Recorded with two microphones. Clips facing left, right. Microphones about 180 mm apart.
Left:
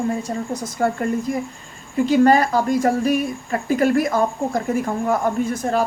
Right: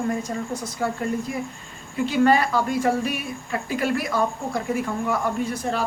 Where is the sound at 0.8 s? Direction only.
50° left (ahead or behind).